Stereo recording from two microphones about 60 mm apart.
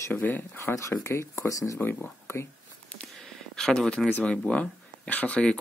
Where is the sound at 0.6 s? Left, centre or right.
Left.